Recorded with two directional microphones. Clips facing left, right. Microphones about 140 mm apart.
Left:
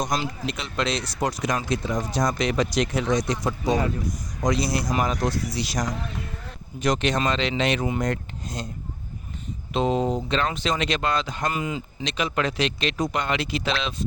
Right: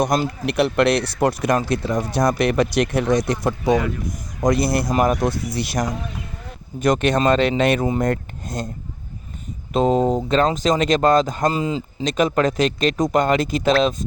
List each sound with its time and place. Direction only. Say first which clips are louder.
0.0 s speech: right 7 dB; 60° right (ahead or behind)
9.7 s speech: right 6 dB; 45° right (ahead or behind)
11.5 s speech: right 6 dB; 30° right (ahead or behind)
12.0 s speech: right 8 dB; 45° right (ahead or behind)